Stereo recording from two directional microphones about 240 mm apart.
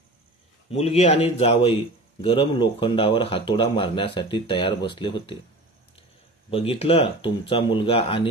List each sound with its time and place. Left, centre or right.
0.7 s speech: left
6.5 s speech: left